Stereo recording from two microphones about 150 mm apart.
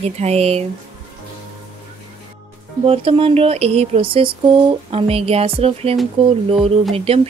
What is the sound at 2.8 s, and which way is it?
Speech, 40° right (ahead or behind).